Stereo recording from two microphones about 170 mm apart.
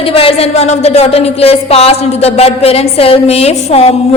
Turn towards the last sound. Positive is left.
turn(degrees=35)  # may be behind; listen again after turning